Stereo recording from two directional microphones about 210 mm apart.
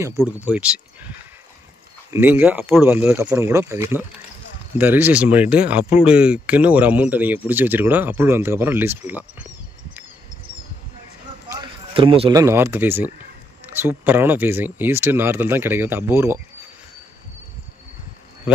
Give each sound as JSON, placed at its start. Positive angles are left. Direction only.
{"t": 0.2, "sound": "speech", "side_deg": -5}
{"t": 11.5, "sound": "speech", "side_deg": -25}